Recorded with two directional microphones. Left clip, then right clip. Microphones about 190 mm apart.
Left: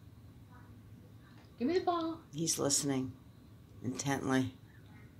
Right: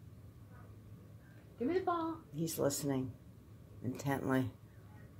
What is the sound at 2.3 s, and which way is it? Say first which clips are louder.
Speech: left 3 dB; 5° left (ahead or behind).